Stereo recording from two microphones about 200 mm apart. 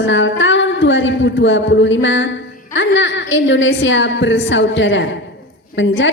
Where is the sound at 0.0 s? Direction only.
70° left (ahead or behind).